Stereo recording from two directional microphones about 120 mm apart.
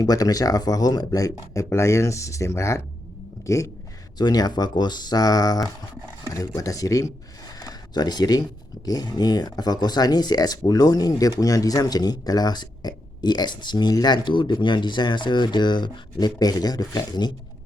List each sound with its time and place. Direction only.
0.0 s speech: 30° left (ahead or behind)